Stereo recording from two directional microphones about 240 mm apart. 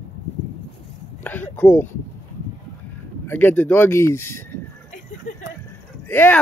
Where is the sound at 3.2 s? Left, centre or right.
Centre.